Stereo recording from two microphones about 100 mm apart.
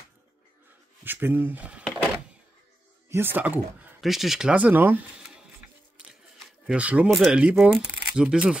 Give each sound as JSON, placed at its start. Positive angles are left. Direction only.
{"t": 1.0, "sound": "speech", "side_deg": -20}
{"t": 3.1, "sound": "speech", "side_deg": -20}
{"t": 4.0, "sound": "speech", "side_deg": 0}
{"t": 6.7, "sound": "speech", "side_deg": -15}
{"t": 7.1, "sound": "speech", "side_deg": 0}
{"t": 7.3, "sound": "speech", "side_deg": -10}